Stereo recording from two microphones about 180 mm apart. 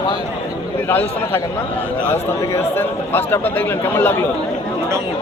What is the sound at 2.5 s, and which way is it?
Speech, 10° left (ahead or behind).